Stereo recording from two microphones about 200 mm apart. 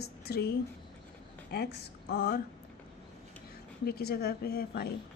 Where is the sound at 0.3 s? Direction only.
50° left (ahead or behind).